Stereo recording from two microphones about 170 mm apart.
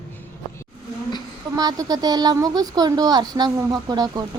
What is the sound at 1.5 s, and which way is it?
Speech, 20° right (ahead or behind).